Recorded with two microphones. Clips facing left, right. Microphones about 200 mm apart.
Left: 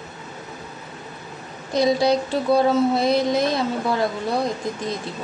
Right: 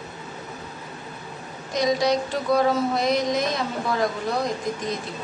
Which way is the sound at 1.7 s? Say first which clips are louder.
Left 3 dB; 30° left (ahead or behind).